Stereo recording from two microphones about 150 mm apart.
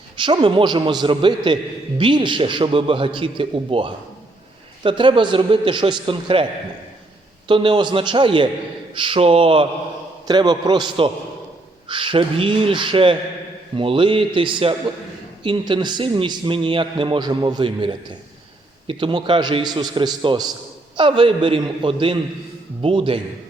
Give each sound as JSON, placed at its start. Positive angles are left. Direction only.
{"t": 0.2, "sound": "a man's voice", "side_deg": -35}
{"t": 7.4, "sound": "a man's voice", "side_deg": -35}
{"t": 10.2, "sound": "a man's voice", "side_deg": -30}